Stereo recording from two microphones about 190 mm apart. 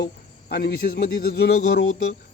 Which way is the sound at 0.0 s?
55° left (ahead or behind).